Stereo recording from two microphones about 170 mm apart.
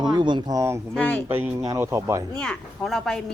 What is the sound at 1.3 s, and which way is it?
A woman's voice, 10° right (ahead or behind).